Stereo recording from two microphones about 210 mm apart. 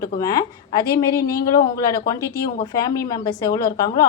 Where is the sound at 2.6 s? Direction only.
15° left (ahead or behind).